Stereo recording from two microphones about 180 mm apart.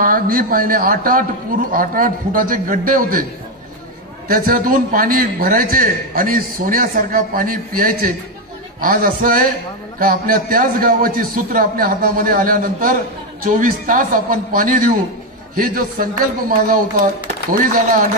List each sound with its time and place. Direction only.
0.0 s a man's voice: 50° right (ahead or behind)
4.3 s a man's voice: 50° right (ahead or behind)